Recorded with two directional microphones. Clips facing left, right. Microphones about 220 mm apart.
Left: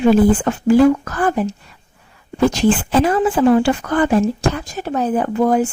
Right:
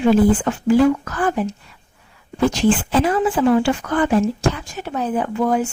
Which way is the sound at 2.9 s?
45° left (ahead or behind).